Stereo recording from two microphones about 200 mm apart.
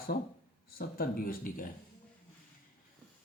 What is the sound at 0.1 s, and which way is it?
Speech, 50° left (ahead or behind).